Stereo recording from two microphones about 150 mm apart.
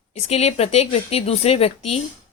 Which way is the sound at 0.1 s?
45° left (ahead or behind).